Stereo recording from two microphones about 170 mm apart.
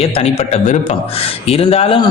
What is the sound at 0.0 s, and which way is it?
Speech, 40° left (ahead or behind).